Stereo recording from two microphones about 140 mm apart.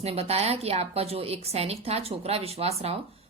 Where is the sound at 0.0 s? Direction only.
45° right (ahead or behind).